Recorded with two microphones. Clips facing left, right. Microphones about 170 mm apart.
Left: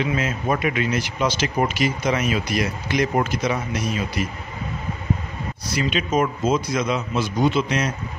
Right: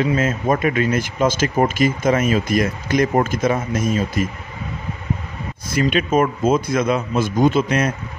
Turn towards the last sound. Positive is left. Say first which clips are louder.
# right 4 dB
turn(degrees=-55)  # may be behind; listen again after turning